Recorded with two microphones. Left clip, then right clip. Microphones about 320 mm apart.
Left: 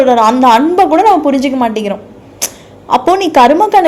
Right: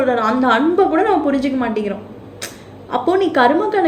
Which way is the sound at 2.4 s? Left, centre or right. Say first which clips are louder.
Left 10 dB; left.